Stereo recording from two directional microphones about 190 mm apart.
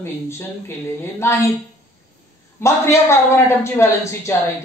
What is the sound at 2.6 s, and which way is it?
Speech, 15° left (ahead or behind).